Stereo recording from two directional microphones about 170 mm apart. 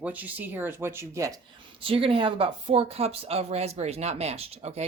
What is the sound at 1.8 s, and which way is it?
Speech, 35° right (ahead or behind).